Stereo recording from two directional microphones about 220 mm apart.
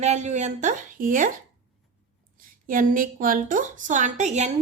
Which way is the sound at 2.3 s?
40° right (ahead or behind).